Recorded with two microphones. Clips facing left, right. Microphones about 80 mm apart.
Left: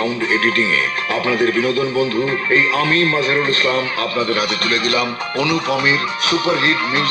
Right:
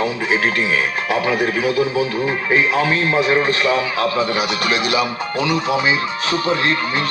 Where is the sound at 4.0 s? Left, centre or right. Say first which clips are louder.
Right 2 dB; right.